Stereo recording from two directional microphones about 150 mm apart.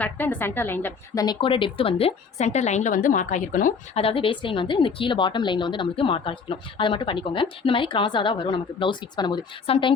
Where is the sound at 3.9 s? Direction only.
40° left (ahead or behind).